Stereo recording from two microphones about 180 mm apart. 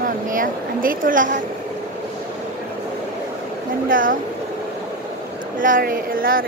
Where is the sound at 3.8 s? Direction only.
50° right (ahead or behind).